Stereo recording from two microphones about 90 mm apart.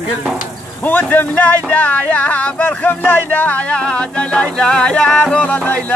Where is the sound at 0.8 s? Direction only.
20° left (ahead or behind).